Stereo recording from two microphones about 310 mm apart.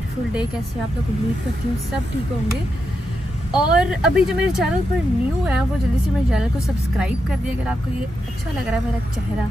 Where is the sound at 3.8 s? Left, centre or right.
Centre.